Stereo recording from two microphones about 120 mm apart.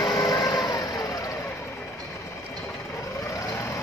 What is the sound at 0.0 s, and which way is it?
Vehicle, 35° left (ahead or behind).